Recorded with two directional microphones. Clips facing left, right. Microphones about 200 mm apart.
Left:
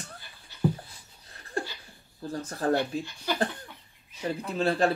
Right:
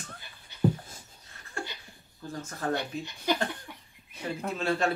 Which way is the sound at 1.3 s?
35° left (ahead or behind).